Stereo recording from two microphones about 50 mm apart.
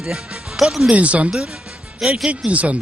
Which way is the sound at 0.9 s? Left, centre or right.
Right.